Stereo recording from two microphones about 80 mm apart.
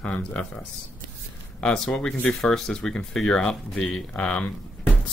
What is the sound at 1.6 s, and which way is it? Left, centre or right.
Speech, centre.